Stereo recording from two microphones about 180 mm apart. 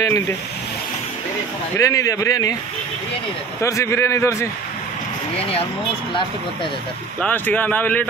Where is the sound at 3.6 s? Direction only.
15° left (ahead or behind).